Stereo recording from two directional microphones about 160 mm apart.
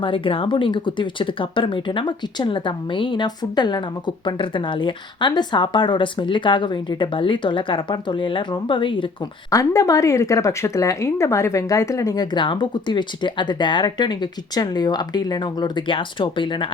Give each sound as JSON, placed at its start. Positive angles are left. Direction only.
{"t": 0.0, "sound": "speech", "side_deg": 35}
{"t": 9.5, "sound": "speech", "side_deg": 20}